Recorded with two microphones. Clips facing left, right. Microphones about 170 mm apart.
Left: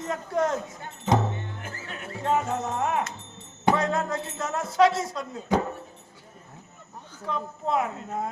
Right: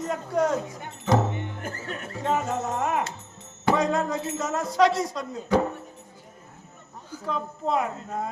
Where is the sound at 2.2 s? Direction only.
Centre (ahead or behind).